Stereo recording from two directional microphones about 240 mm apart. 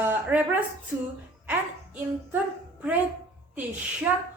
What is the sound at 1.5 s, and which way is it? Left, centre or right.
Speech, centre.